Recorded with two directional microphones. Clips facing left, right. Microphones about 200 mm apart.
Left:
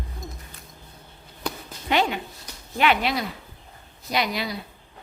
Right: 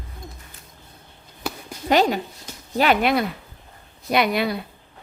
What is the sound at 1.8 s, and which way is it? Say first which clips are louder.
Speech: right 5 dB; 40° right (ahead or behind).